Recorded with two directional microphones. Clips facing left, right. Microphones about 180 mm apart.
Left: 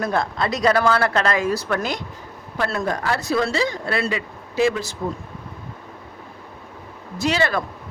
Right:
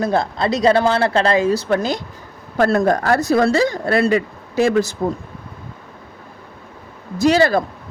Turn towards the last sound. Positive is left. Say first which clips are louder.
# right 7 dB
turn(degrees=-35)  # may be behind; listen again after turning